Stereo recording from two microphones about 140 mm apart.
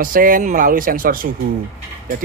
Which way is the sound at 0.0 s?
85° right.